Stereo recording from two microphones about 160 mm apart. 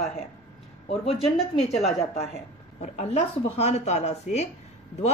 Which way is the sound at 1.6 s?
40° left (ahead or behind).